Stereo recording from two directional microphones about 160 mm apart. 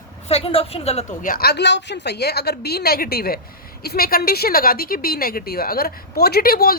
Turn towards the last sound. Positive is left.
turn(degrees=70)  # may be behind; listen again after turning